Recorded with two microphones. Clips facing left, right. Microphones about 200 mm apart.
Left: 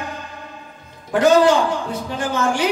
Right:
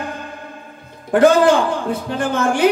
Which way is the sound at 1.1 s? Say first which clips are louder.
Right 2 dB; 55° right (ahead or behind).